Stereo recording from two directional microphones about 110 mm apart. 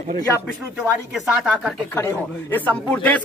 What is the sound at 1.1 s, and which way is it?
Speech, centre (ahead or behind).